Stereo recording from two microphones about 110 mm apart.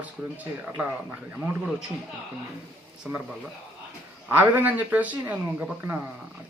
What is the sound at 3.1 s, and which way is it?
Speech, 10° right (ahead or behind).